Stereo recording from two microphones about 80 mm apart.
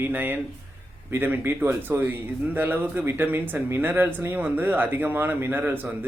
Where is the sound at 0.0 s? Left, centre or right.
Right.